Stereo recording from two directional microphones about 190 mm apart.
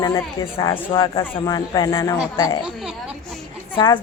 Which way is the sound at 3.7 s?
25° left (ahead or behind).